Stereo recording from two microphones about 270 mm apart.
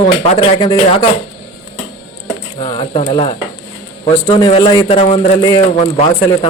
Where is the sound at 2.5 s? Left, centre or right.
Centre.